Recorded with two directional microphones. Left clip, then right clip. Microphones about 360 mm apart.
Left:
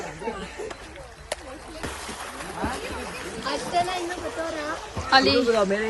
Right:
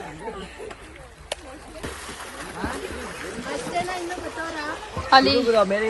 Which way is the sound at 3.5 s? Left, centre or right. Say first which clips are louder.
Left 3 dB; centre.